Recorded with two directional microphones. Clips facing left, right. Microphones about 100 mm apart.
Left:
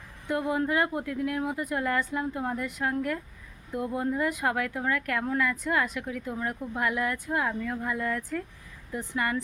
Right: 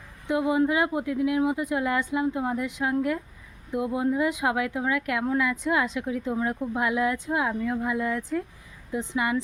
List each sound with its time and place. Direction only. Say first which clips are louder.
0.3 s speech: right 4 dB; 10° right (ahead or behind)